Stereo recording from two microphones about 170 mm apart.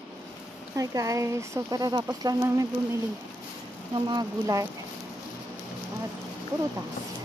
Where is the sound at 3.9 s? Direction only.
25° right (ahead or behind).